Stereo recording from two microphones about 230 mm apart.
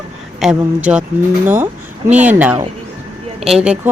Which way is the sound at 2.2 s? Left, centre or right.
Centre.